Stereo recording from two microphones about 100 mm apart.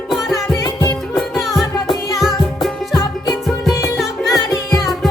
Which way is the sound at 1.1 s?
Centre (ahead or behind).